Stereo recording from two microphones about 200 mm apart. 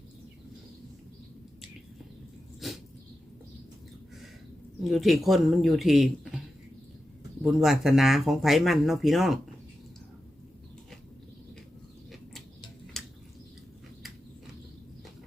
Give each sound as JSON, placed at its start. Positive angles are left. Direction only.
{"t": 2.6, "sound": "dog", "side_deg": 0}
{"t": 4.8, "sound": "speech", "side_deg": 0}
{"t": 7.4, "sound": "speech", "side_deg": 0}
{"t": 12.9, "sound": "a sound", "side_deg": 0}